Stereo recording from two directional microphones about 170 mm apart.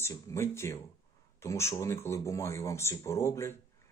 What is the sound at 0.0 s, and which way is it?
Speech, 15° left (ahead or behind).